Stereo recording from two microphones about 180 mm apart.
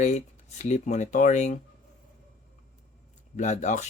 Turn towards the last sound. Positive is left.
turn(degrees=40)  # may be behind; listen again after turning